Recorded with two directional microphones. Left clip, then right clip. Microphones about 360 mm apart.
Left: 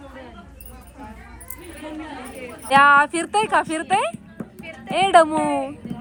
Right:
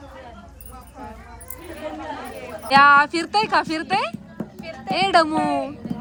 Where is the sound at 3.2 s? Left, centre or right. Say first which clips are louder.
Even; centre.